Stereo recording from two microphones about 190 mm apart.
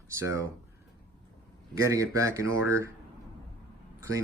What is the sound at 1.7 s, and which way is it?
Speech, 15° right (ahead or behind).